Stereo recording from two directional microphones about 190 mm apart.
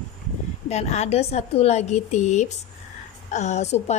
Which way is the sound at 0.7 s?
35° left (ahead or behind).